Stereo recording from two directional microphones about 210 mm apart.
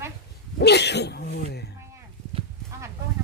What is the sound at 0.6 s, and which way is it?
Speech, 55° left (ahead or behind).